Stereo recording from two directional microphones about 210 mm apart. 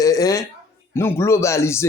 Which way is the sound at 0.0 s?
15° left (ahead or behind).